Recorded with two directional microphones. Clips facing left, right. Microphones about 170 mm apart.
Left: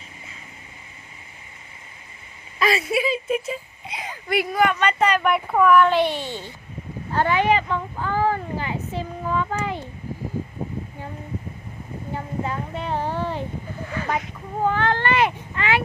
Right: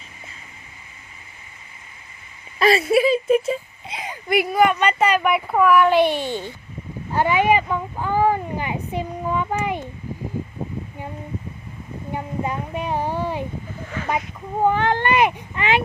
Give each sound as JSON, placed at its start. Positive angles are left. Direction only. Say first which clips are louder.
{"t": 2.6, "sound": "speech", "louder": "right 5 dB", "side_deg": -35}
{"t": 3.8, "sound": "speech", "louder": "right 2 dB", "side_deg": -20}
{"t": 12.1, "sound": "speech", "louder": "right 2 dB", "side_deg": -15}
{"t": 14.6, "sound": "speech", "louder": "right 3 dB", "side_deg": -15}